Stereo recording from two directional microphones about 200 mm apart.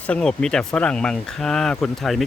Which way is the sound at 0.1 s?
5° left (ahead or behind).